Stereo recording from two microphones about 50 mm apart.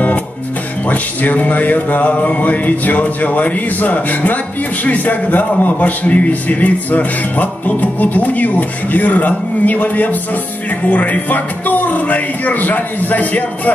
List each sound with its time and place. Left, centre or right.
0.8 s a man's voice: left